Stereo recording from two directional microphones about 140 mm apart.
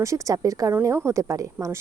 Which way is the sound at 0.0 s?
20° right (ahead or behind).